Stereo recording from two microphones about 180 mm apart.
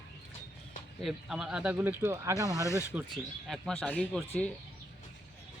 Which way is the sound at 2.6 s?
15° left (ahead or behind).